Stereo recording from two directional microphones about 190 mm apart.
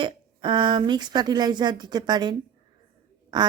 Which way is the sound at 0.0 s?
25° right (ahead or behind).